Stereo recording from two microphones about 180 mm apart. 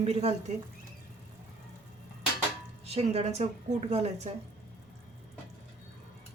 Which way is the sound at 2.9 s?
35° right (ahead or behind).